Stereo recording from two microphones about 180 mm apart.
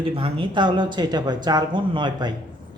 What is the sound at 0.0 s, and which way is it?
Speech, 30° right (ahead or behind).